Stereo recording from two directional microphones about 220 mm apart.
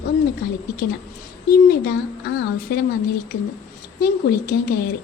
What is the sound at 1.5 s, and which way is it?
A woman's voice, 45° left (ahead or behind).